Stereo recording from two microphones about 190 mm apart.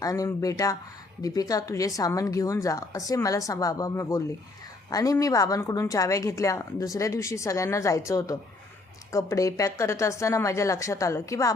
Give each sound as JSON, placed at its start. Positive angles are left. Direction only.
{"t": 0.0, "sound": "a woman's voice", "side_deg": 15}